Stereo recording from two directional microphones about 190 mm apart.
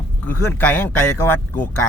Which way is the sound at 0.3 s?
10° left (ahead or behind).